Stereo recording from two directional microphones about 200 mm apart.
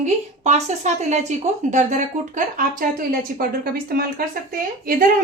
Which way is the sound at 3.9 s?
50° right (ahead or behind).